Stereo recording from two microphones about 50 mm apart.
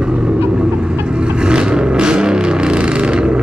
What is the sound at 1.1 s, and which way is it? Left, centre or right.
Vehicle, centre.